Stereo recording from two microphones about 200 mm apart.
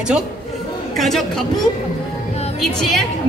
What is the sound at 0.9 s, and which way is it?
Speech, centre (ahead or behind).